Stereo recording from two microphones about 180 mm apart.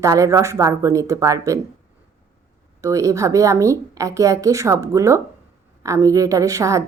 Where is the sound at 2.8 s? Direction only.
15° right (ahead or behind).